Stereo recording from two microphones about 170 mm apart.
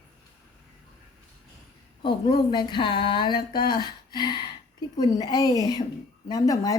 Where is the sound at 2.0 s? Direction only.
25° left (ahead or behind).